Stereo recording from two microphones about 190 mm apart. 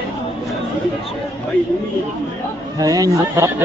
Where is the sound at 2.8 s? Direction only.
20° right (ahead or behind).